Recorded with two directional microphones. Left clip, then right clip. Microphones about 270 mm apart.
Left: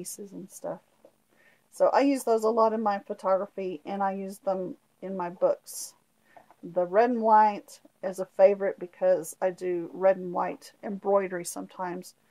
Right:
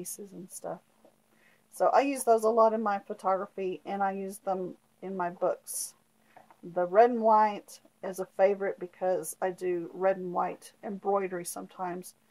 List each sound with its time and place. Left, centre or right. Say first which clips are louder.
0.0 s speech: left 2 dB; left
1.8 s speech: left 2 dB; left